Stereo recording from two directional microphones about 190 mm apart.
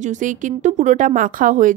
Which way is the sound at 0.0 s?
40° right (ahead or behind).